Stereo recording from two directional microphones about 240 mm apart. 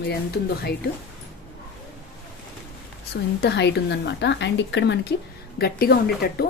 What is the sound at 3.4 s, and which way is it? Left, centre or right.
Speech, left.